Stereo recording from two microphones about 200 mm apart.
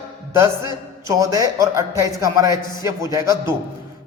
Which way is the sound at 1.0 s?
15° right (ahead or behind).